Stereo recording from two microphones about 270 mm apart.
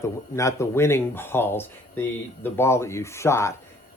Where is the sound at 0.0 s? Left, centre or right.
Centre.